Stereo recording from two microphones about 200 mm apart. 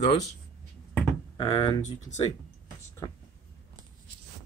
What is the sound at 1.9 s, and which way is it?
Speech, 35° left (ahead or behind).